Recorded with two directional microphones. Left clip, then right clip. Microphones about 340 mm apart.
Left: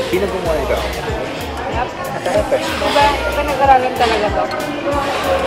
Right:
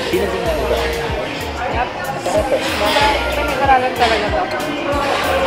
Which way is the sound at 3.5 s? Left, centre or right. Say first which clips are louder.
Left 3 dB; centre.